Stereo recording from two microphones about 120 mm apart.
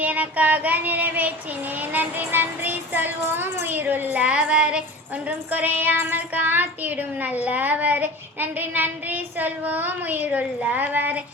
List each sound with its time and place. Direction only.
0.0 s child singing: 15° right (ahead or behind)
1.8 s a woman's voice: 15° right (ahead or behind)